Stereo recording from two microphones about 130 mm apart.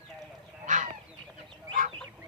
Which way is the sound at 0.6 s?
75° right (ahead or behind).